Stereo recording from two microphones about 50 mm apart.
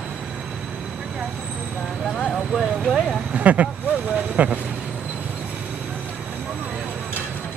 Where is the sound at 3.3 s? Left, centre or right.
Right.